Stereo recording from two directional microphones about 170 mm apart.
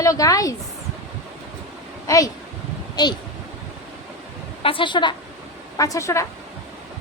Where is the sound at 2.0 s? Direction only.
20° left (ahead or behind).